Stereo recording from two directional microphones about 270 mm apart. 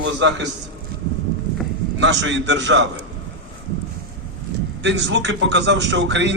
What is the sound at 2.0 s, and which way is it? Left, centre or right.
A man's voice, right.